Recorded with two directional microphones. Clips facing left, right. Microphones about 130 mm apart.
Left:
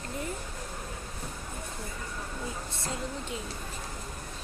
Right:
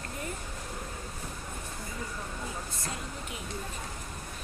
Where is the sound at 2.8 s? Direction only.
30° left (ahead or behind).